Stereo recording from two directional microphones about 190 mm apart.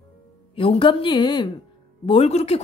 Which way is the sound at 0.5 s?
30° left (ahead or behind).